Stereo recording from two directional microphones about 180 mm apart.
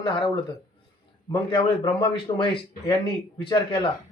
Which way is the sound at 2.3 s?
30° left (ahead or behind).